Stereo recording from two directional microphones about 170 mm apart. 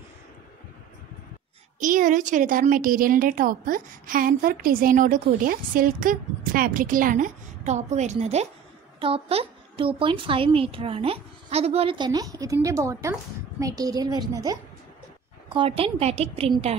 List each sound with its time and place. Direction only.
1.8 s a woman's voice: 50° right (ahead or behind); by 14.6 s 25° right (ahead or behind)
15.5 s a woman's voice: 35° right (ahead or behind)